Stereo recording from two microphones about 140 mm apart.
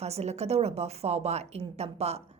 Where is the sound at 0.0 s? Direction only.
50° right (ahead or behind).